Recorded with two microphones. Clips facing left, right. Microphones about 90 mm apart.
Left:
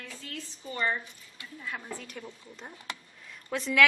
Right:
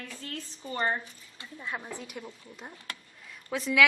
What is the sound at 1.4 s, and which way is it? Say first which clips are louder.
A woman's voice: right 2 dB; 25° right (ahead or behind).